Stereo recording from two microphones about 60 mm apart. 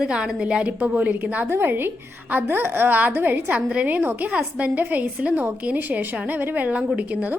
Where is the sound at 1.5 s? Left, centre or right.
Right.